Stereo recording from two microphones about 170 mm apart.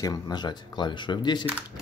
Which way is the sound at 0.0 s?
25° left (ahead or behind).